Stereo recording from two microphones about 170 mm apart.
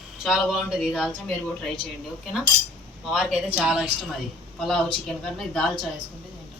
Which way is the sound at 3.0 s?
5° right (ahead or behind).